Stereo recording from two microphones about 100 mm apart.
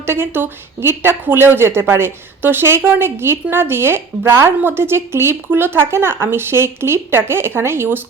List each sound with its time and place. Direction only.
0.0 s a woman's voice: 25° right (ahead or behind)